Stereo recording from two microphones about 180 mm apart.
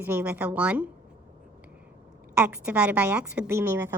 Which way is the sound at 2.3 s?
10° right (ahead or behind).